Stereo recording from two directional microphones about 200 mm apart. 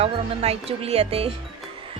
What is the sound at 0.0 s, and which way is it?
Speech, 30° right (ahead or behind).